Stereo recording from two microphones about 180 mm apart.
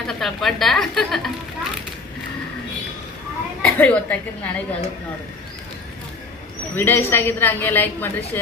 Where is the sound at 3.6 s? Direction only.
10° left (ahead or behind).